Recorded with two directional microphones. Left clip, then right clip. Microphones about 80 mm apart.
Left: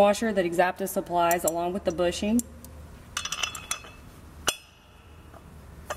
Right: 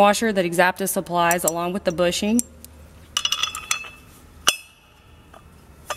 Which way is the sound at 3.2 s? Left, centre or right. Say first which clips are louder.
Right 8 dB; right.